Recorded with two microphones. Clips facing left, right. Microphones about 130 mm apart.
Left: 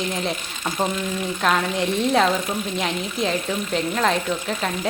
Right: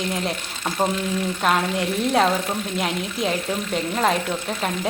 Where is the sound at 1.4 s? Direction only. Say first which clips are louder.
Left 1 dB; 5° right (ahead or behind).